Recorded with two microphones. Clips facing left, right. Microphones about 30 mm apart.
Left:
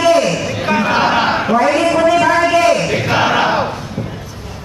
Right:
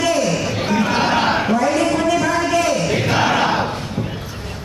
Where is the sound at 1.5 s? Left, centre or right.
Left.